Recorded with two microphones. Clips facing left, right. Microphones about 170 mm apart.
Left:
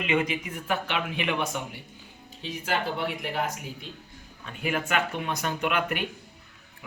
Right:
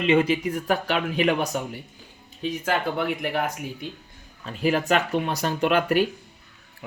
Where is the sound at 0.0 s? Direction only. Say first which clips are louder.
Right 7 dB; 30° right (ahead or behind).